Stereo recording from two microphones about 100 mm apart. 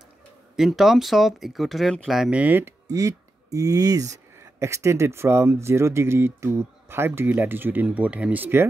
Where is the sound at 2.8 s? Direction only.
35° right (ahead or behind).